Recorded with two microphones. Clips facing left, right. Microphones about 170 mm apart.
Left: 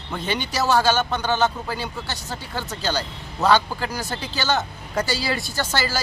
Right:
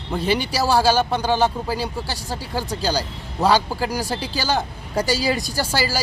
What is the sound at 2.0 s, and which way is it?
Speech, 10° right (ahead or behind).